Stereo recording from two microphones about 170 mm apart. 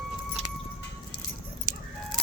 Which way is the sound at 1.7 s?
55° right (ahead or behind).